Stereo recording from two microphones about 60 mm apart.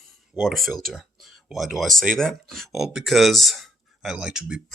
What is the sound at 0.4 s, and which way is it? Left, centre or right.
Speech, centre.